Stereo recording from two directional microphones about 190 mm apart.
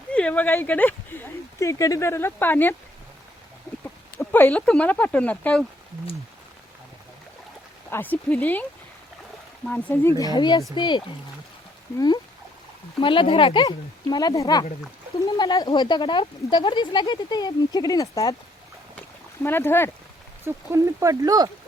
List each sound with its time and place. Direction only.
0.1 s speech: 5° left (ahead or behind)
4.2 s speech: 10° left (ahead or behind)
7.9 s speech: 10° left (ahead or behind)
9.6 s speech: 10° left (ahead or behind)
19.4 s speech: 10° left (ahead or behind)
20.4 s speech: 15° right (ahead or behind)